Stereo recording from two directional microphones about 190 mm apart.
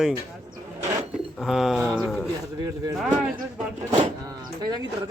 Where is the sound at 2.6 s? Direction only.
20° right (ahead or behind).